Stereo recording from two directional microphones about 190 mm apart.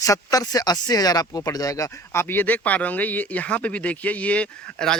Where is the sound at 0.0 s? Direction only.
20° left (ahead or behind).